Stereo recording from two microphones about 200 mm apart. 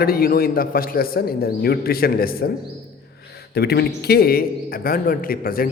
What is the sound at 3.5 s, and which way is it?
Speech, 55° left (ahead or behind).